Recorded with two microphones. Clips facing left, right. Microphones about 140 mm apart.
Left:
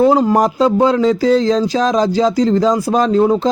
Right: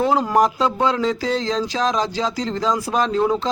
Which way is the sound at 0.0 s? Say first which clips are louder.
Left 6 dB; 35° left (ahead or behind).